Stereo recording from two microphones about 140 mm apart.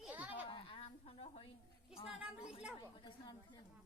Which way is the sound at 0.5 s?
40° left (ahead or behind).